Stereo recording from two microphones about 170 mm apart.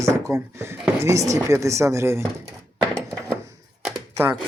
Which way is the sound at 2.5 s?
5° left (ahead or behind).